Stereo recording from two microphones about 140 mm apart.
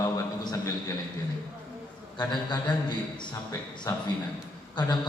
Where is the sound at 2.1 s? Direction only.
30° left (ahead or behind).